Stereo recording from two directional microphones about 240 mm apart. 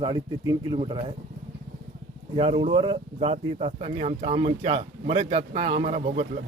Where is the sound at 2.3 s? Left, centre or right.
Right.